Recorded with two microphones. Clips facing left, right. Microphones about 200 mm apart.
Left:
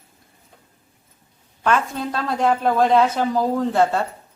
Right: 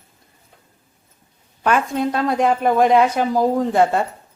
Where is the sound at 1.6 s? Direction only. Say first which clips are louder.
Right 3 dB; 15° right (ahead or behind).